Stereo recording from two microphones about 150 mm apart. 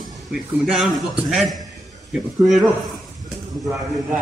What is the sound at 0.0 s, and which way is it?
A man's voice, centre (ahead or behind).